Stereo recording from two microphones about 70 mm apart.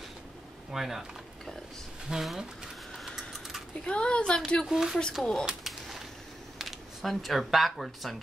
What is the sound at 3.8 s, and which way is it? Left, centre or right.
Speech, centre.